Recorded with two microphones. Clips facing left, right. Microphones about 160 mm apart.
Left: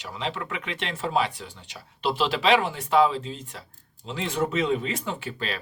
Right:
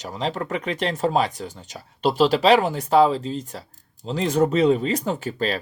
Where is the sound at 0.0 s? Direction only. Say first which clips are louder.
Right 5 dB; 40° right (ahead or behind).